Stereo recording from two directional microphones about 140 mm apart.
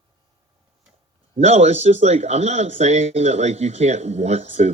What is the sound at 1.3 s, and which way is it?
Speech, 55° right (ahead or behind).